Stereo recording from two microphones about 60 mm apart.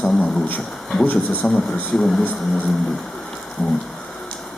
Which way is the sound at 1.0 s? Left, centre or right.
Left.